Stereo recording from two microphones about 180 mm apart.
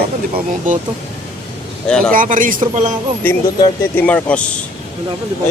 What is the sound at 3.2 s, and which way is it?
Speech, 10° left (ahead or behind).